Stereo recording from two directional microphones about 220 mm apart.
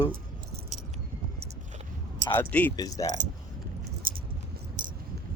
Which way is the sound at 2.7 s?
15° left (ahead or behind).